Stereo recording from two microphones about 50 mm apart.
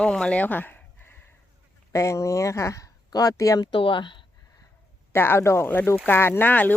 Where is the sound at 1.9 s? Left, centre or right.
Left.